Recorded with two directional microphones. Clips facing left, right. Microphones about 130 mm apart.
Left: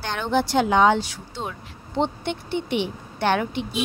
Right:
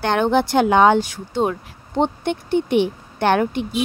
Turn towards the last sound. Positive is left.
turn(degrees=-50)  # may be behind; listen again after turning